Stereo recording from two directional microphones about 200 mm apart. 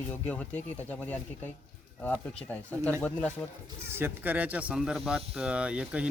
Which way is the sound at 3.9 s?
10° right (ahead or behind).